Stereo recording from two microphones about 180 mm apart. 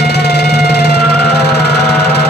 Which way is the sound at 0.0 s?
65° left (ahead or behind).